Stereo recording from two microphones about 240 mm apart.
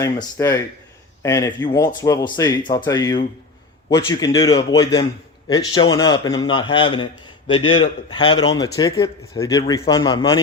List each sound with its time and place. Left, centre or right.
0.0 s a man's voice: centre